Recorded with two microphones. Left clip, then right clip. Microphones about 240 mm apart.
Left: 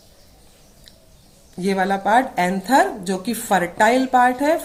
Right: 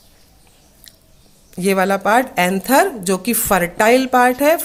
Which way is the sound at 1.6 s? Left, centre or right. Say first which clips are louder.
Right 4 dB; right.